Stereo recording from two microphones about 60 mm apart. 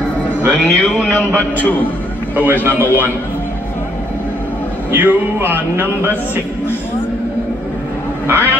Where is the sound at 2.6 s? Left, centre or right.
Right.